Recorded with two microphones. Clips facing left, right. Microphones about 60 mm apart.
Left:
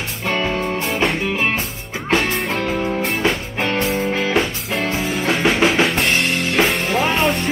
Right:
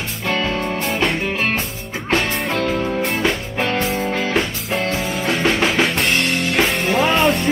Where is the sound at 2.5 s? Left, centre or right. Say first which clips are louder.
Right 1 dB; centre.